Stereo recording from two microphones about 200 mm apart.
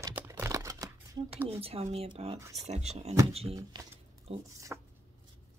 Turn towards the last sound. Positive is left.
turn(degrees=-10)  # may be behind; listen again after turning